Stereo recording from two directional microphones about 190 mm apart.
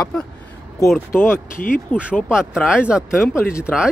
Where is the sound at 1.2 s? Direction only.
10° left (ahead or behind).